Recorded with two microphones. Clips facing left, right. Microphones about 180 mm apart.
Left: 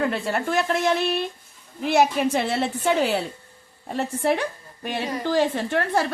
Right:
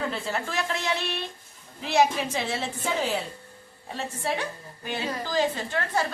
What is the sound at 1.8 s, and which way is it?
A woman's voice, 50° left (ahead or behind).